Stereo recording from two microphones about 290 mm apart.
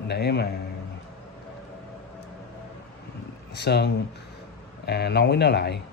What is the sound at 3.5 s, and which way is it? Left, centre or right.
A man's voice, left.